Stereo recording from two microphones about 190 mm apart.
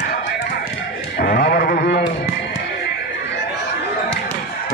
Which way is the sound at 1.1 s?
55° left (ahead or behind).